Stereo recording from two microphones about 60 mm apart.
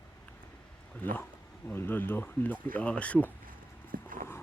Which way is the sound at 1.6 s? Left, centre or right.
Left.